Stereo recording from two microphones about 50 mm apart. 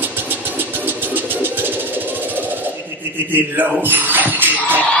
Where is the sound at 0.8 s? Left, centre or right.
Right.